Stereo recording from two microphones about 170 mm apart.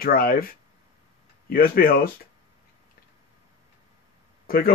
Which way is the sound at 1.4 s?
60° left (ahead or behind).